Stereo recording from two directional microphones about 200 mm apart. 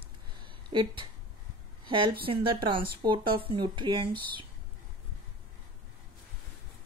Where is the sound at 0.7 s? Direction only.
20° right (ahead or behind).